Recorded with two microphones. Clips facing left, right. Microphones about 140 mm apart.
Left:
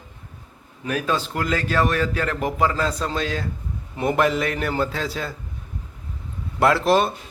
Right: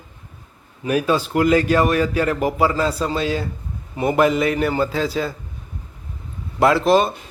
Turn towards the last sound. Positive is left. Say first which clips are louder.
# right 3 dB
turn(degrees=0)  # may be behind; listen again after turning